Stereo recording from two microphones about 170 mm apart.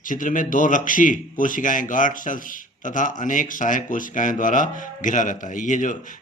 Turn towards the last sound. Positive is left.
turn(degrees=50)  # may be behind; listen again after turning